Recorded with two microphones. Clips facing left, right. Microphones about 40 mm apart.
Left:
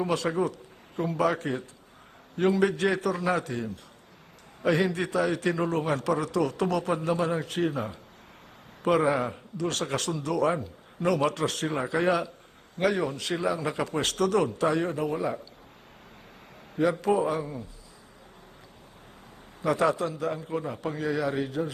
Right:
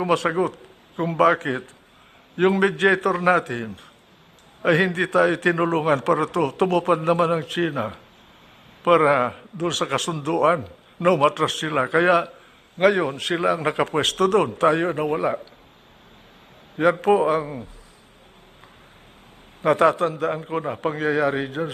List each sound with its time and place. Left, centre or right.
0.0 s a man's voice: right
16.7 s a man's voice: right
19.6 s a man's voice: right